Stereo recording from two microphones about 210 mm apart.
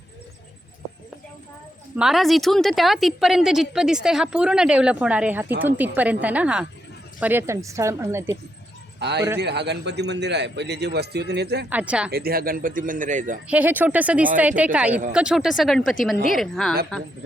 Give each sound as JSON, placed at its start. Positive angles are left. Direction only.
{"t": 2.0, "sound": "a woman's voice", "side_deg": 0}
{"t": 9.0, "sound": "a man's voice", "side_deg": -55}
{"t": 11.7, "sound": "a woman's voice", "side_deg": -5}
{"t": 12.1, "sound": "speech", "side_deg": -45}
{"t": 13.5, "sound": "a woman's voice", "side_deg": -10}